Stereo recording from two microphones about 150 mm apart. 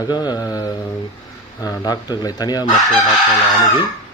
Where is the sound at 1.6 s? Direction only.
25° left (ahead or behind).